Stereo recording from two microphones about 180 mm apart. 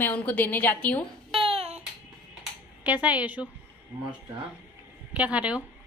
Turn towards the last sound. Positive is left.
turn(degrees=-10)  # may be behind; listen again after turning